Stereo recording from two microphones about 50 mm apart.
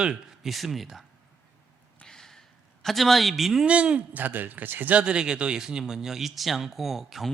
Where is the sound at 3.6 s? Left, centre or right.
Right.